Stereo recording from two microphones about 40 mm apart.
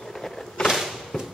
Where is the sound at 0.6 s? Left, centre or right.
Centre.